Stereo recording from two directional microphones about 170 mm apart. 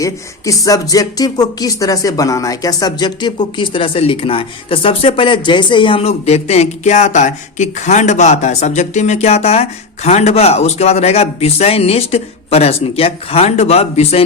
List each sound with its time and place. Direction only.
0.0 s speech: 20° left (ahead or behind); by 14.3 s 35° left (ahead or behind)